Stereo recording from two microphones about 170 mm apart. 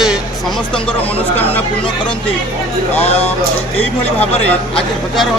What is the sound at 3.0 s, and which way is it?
Speech, 35° left (ahead or behind).